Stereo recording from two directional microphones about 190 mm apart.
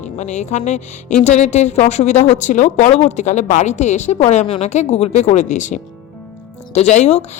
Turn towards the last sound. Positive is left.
turn(degrees=35)  # may be behind; listen again after turning